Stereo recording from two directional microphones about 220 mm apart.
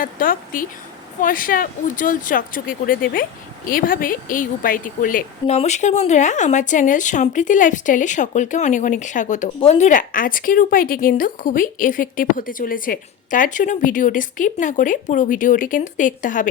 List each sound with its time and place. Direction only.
0.0 s a woman's voice: 40° left (ahead or behind)